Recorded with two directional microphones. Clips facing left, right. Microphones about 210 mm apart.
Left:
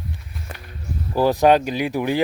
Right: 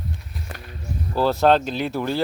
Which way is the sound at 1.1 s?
15° left (ahead or behind).